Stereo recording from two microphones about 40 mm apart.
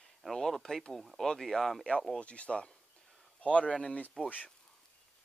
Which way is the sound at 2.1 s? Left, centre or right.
Left.